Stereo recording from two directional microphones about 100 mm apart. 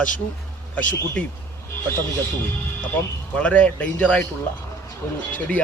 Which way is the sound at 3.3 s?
15° left (ahead or behind).